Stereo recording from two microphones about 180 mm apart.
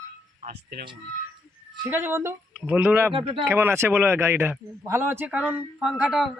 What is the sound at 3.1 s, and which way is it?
Speech, 30° right (ahead or behind).